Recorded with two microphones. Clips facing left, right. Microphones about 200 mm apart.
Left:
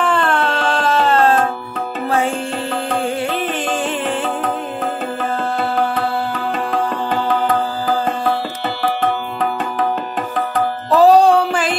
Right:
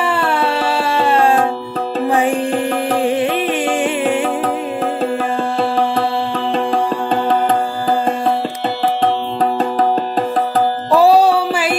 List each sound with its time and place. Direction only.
0.0 s a sound: 10° right (ahead or behind)
2.0 s music: 15° right (ahead or behind)
5.9 s music: 30° right (ahead or behind)
9.4 s music: 35° right (ahead or behind)
10.9 s music: 10° right (ahead or behind)